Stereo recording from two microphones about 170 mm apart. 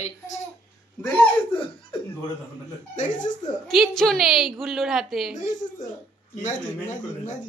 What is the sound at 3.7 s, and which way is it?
A woman's voice, centre (ahead or behind).